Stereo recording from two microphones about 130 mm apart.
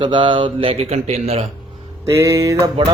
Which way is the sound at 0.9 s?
55° right (ahead or behind).